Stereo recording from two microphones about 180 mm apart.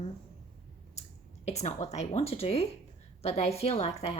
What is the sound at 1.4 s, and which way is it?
A woman's voice, 40° left (ahead or behind).